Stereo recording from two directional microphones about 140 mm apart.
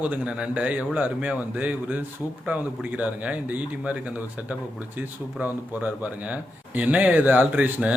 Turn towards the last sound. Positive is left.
turn(degrees=-10)  # may be behind; listen again after turning